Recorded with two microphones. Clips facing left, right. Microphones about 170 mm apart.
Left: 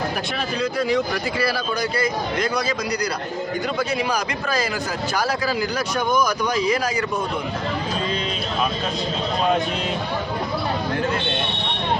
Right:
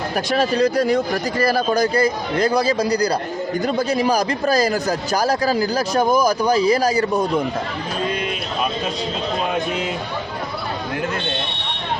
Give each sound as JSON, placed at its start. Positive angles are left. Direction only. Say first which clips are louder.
{"t": 0.3, "sound": "speech", "louder": "right 9 dB", "side_deg": -40}